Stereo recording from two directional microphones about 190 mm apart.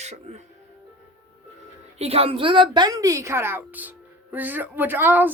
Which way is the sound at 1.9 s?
30° right (ahead or behind).